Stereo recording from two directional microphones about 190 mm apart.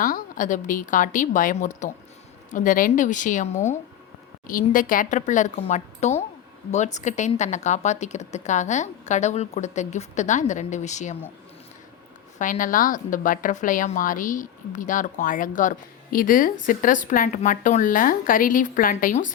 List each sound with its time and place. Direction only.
0.0 s a woman's voice: 45° left (ahead or behind)
4.7 s speech: 45° left (ahead or behind)
12.4 s a woman's voice: 45° left (ahead or behind)